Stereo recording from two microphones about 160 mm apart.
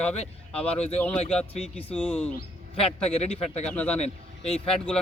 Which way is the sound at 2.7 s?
35° left (ahead or behind).